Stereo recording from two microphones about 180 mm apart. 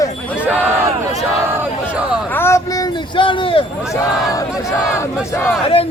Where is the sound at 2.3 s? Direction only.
15° left (ahead or behind); by 3.6 s 30° left (ahead or behind).